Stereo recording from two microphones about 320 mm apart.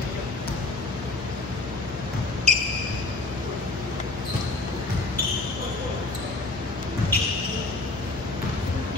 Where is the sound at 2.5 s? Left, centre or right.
Right.